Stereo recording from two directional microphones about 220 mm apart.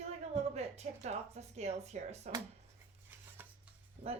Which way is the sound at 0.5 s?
30° right (ahead or behind).